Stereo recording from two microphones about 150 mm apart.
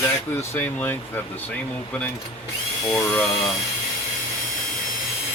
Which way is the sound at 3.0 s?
10° left (ahead or behind).